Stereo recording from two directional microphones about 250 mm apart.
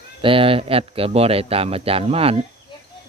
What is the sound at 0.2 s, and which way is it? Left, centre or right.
Speech, right.